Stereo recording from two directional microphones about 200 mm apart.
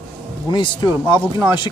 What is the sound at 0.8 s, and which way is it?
Speech, 10° right (ahead or behind).